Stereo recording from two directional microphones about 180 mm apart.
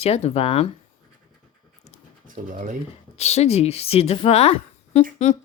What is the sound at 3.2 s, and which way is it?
Speech, 35° left (ahead or behind).